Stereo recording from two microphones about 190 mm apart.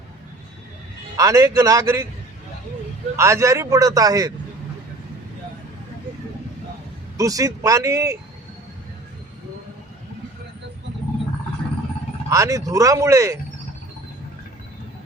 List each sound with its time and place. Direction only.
1.1 s a man's voice: 15° right (ahead or behind)
3.2 s a man's voice: 15° right (ahead or behind)
7.2 s a man's voice: 15° right (ahead or behind)
12.3 s a man's voice: 15° right (ahead or behind)